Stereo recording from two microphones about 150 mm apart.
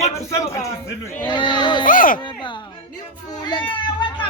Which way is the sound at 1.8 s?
65° left (ahead or behind).